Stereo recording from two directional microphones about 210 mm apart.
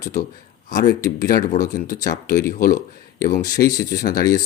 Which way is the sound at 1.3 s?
40° left (ahead or behind).